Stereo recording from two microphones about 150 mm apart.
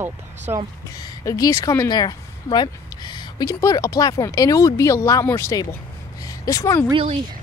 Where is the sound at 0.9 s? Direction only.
25° left (ahead or behind).